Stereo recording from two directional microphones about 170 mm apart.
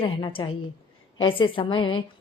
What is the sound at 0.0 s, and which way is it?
A woman's voice, 30° left (ahead or behind).